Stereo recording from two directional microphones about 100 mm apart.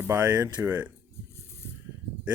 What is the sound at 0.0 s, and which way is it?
Speech, 20° right (ahead or behind).